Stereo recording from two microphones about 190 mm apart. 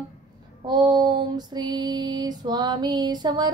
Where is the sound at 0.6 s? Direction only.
20° right (ahead or behind).